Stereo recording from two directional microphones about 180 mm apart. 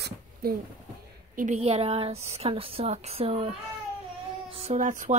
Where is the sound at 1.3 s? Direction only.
40° right (ahead or behind).